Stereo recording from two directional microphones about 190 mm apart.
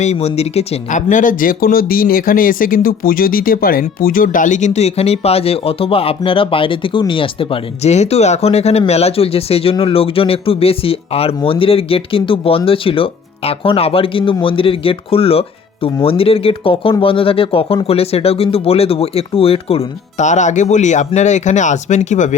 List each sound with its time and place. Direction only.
0.0 s speech: 35° left (ahead or behind)